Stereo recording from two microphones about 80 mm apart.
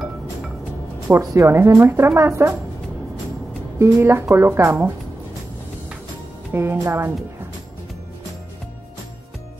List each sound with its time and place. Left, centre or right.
1.2 s a woman's voice: right
1.5 s speech: right
3.8 s speech: right
6.5 s speech: right